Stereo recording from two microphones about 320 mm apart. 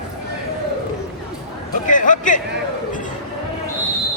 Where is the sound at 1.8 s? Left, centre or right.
Left.